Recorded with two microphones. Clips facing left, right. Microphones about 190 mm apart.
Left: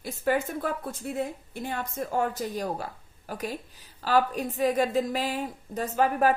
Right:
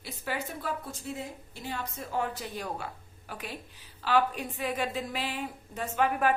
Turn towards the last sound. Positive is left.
turn(degrees=40)  # may be behind; listen again after turning